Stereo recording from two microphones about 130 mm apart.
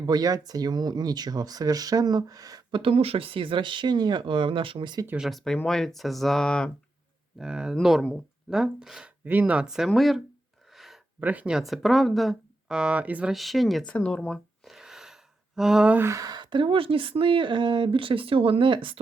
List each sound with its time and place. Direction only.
0.0 s speech: 30° right (ahead or behind)
2.8 s speech: 45° right (ahead or behind)
5.0 s speech: 5° right (ahead or behind)
7.3 s speech: 5° right (ahead or behind)
10.8 s a sound: centre (ahead or behind)
11.2 s speech: 10° right (ahead or behind)
13.3 s speech: centre (ahead or behind)
16.0 s speech: 30° right (ahead or behind)